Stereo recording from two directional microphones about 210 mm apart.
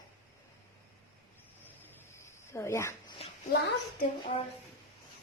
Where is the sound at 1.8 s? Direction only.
10° left (ahead or behind).